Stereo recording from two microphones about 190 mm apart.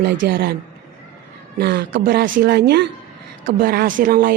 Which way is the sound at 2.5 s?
60° right (ahead or behind).